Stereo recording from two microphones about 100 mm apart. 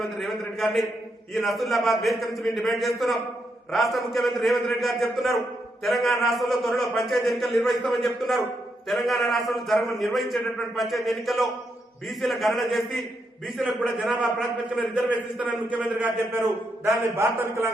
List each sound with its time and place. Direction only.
0.0 s a man's voice: centre (ahead or behind); by 16.4 s 15° right (ahead or behind)
16.4 s a man's voice: 30° right (ahead or behind)